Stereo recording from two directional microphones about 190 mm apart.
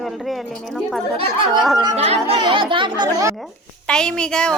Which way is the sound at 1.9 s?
35° right (ahead or behind).